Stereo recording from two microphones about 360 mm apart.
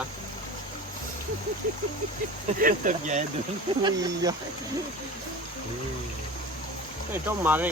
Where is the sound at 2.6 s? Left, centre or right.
Right.